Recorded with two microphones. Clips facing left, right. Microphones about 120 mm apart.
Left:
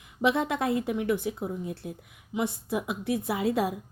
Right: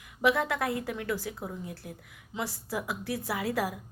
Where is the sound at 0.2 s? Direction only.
20° left (ahead or behind).